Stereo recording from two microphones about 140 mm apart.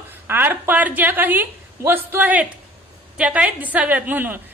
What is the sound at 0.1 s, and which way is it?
A woman's voice, 15° right (ahead or behind).